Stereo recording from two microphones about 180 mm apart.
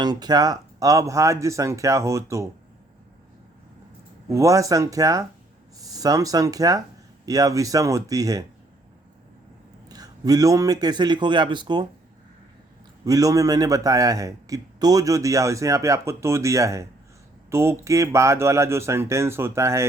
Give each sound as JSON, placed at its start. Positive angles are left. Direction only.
{"t": 0.0, "sound": "a man's voice", "side_deg": -20}
{"t": 4.3, "sound": "a man's voice", "side_deg": -15}
{"t": 9.9, "sound": "a man's voice", "side_deg": -20}
{"t": 13.1, "sound": "a man's voice", "side_deg": -20}